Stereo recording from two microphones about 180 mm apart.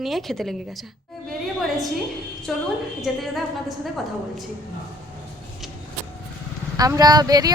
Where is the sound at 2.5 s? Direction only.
5° left (ahead or behind).